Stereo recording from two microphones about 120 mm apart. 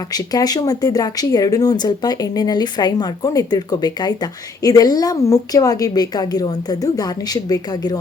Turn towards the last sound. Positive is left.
turn(degrees=35)  # may be behind; listen again after turning